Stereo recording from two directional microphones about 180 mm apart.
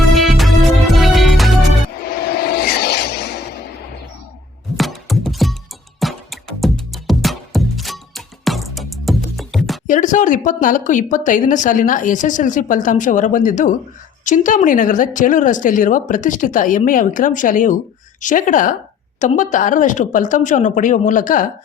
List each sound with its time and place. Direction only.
0.1 s music: centre (ahead or behind)
2.0 s a sound: 60° left (ahead or behind)
4.8 s music: centre (ahead or behind)
9.8 s speech: 45° left (ahead or behind)